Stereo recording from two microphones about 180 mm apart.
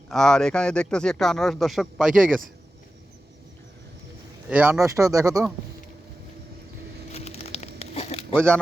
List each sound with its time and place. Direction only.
0.1 s speech: centre (ahead or behind)
4.4 s speech: 10° right (ahead or behind)
7.1 s crumpling: 35° left (ahead or behind)